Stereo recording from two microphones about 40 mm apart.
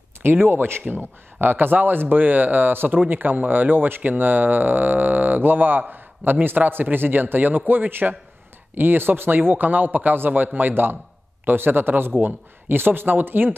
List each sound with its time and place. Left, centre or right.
0.2 s speech: right
0.8 s speech: right
5.9 s a sound: right
6.4 s speech: right
12.2 s a man's voice: right
12.6 s speech: right